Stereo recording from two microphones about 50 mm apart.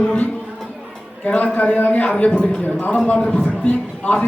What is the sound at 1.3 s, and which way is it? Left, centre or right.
A man's voice, left.